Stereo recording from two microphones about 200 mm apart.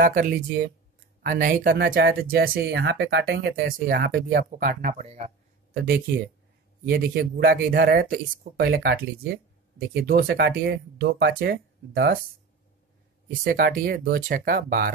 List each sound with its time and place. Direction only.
0.0 s speech: 45° right (ahead or behind)
6.9 s speech: 50° right (ahead or behind)
13.3 s speech: 45° right (ahead or behind)